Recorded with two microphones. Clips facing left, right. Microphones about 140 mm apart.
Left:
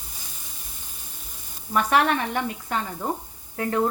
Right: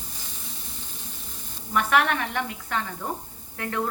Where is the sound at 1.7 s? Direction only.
30° left (ahead or behind).